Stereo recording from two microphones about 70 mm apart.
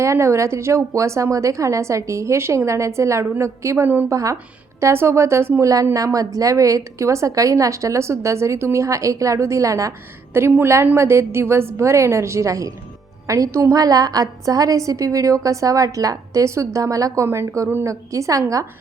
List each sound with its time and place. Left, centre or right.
0.0 s a woman's voice: right
4.8 s speech: right
5.6 s a woman's voice: right
10.3 s a woman's voice: right
17.2 s a woman's voice: right